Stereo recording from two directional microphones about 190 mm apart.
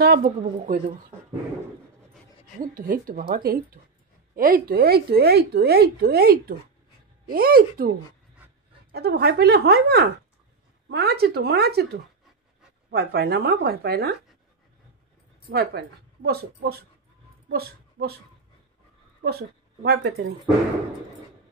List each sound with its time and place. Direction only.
0.0 s a woman's voice: 50° right (ahead or behind)
2.6 s a woman's voice: 45° right (ahead or behind)
8.9 s speech: 55° right (ahead or behind)
15.5 s a woman's voice: 55° right (ahead or behind)
19.2 s speech: 55° right (ahead or behind)